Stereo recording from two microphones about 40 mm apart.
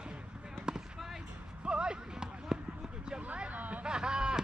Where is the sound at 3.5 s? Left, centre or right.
Right.